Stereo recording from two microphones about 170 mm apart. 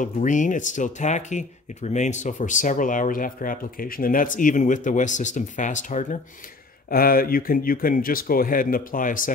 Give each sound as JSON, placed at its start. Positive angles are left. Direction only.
{"t": 0.0, "sound": "speech", "side_deg": 50}
{"t": 6.9, "sound": "speech", "side_deg": 60}